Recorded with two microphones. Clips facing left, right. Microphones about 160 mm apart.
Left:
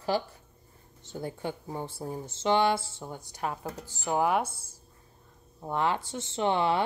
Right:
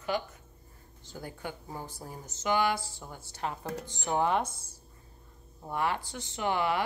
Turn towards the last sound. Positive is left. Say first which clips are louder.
# left 3 dB
turn(degrees=25)  # may be behind; listen again after turning